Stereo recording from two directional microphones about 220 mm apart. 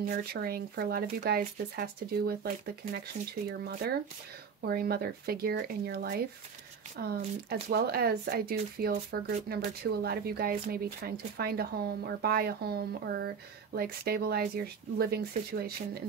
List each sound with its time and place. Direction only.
0.0 s speech: 45° right (ahead or behind)
7.4 s speech: 45° right (ahead or behind)